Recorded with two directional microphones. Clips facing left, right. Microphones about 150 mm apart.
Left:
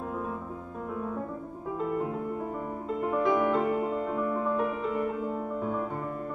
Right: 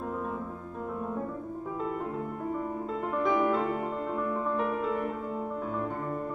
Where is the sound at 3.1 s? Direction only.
5° left (ahead or behind).